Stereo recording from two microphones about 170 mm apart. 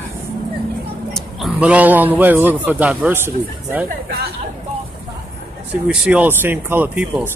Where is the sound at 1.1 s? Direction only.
Centre (ahead or behind).